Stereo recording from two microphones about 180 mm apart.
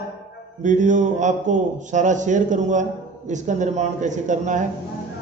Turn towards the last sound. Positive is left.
turn(degrees=-45)  # may be behind; listen again after turning